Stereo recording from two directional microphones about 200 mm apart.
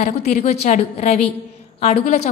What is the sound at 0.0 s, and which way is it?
A woman's voice, 35° left (ahead or behind).